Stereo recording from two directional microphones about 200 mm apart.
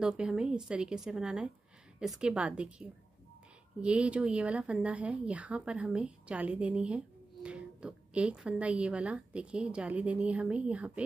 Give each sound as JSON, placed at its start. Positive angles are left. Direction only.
{"t": 0.0, "sound": "a woman's voice", "side_deg": -5}